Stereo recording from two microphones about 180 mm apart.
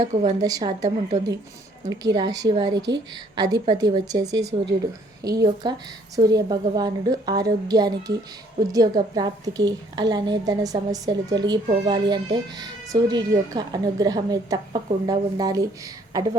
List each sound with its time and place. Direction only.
0.1 s a woman's voice: 40° right (ahead or behind)
0.4 s a woman's voice: 20° right (ahead or behind)
1.9 s a woman's voice: 20° right (ahead or behind)